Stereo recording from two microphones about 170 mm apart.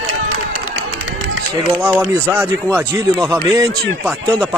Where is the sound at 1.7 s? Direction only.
15° right (ahead or behind).